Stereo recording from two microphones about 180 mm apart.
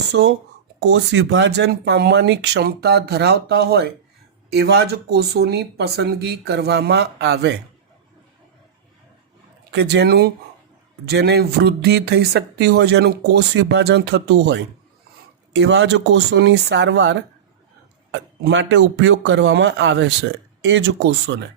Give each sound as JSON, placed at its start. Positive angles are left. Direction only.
{"t": 0.1, "sound": "speech", "side_deg": -70}
{"t": 9.7, "sound": "speech", "side_deg": -70}
{"t": 18.4, "sound": "speech", "side_deg": -80}